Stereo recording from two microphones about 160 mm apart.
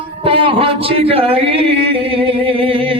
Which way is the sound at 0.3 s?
30° right (ahead or behind).